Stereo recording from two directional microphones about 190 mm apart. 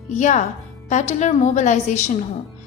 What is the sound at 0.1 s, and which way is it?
A woman's voice, 35° left (ahead or behind).